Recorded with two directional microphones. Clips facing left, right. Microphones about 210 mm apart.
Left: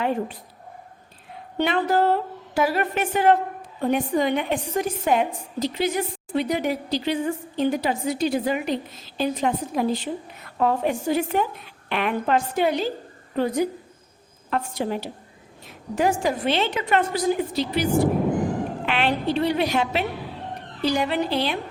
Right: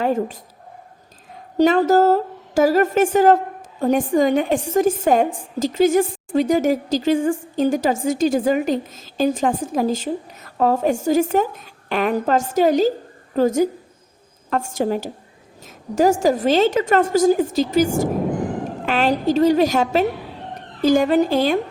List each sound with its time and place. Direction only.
0.0 s a woman's voice: 45° right (ahead or behind)
1.5 s a woman's voice: 40° right (ahead or behind)